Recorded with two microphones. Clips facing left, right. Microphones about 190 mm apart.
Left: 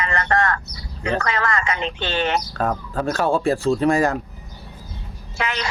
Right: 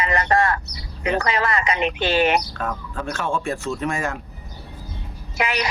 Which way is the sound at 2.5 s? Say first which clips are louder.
Left 5 dB; 40° left (ahead or behind).